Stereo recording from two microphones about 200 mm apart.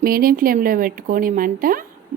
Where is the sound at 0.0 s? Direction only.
45° right (ahead or behind).